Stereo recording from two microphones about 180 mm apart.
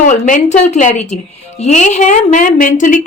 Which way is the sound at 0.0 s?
45° left (ahead or behind).